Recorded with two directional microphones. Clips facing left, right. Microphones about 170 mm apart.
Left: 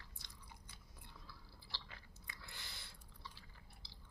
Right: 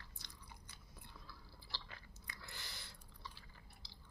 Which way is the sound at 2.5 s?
20° left (ahead or behind).